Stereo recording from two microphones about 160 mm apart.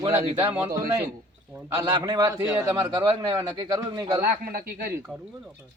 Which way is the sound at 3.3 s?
25° right (ahead or behind).